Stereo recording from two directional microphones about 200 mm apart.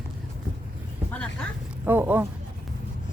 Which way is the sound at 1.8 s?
10° right (ahead or behind).